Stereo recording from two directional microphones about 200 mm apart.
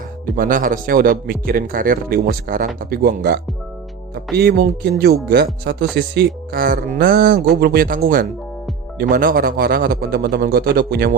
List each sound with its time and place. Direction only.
0.3 s a man's voice: 45° right (ahead or behind)